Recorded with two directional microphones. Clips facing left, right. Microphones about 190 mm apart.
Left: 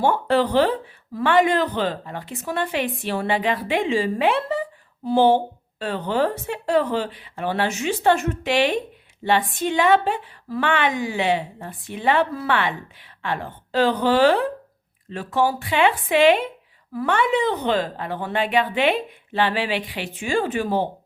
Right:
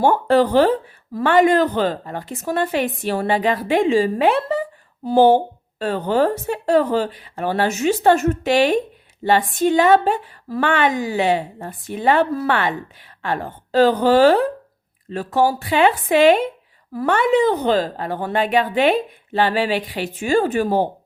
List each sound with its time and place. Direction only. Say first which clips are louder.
0.0 s a woman's voice: right 4 dB; 45° right (ahead or behind)